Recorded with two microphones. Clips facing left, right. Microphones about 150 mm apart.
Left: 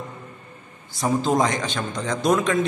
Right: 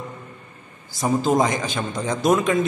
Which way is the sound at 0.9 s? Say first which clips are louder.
Right 1 dB; centre (ahead or behind).